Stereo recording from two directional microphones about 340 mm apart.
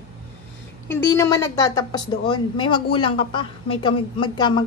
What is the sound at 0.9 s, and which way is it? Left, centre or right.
A woman's voice, centre.